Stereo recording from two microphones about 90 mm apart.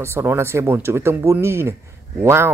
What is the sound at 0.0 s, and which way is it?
Speech, 25° right (ahead or behind).